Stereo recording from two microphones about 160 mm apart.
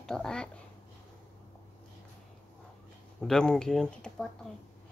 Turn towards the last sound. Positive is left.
turn(degrees=5)  # may be behind; listen again after turning